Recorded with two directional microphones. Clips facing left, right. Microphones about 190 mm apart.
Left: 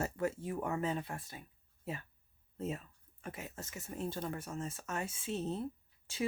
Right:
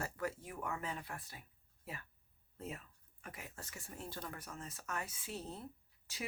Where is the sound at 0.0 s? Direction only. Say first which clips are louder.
Left 6 dB; 25° left (ahead or behind).